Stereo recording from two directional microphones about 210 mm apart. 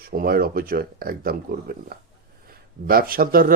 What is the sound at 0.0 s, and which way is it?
Speech, 45° right (ahead or behind).